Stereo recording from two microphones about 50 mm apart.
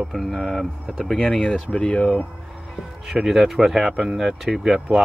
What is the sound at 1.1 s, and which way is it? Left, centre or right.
Speech, centre.